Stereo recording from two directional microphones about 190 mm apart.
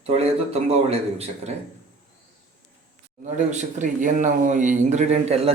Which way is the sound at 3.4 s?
40° right (ahead or behind).